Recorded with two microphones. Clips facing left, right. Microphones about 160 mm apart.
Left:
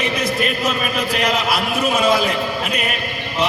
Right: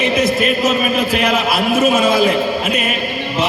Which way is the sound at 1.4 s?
50° right (ahead or behind).